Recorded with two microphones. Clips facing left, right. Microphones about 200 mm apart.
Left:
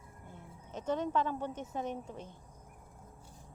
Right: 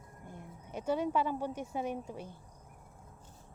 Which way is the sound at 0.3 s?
15° right (ahead or behind).